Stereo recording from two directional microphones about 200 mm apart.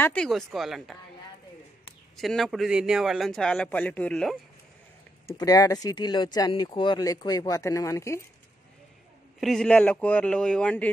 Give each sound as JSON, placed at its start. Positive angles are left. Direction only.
{"t": 0.0, "sound": "a man's voice", "side_deg": 5}
{"t": 2.1, "sound": "a man's voice", "side_deg": 0}
{"t": 5.4, "sound": "speech", "side_deg": 15}
{"t": 9.4, "sound": "a man's voice", "side_deg": 0}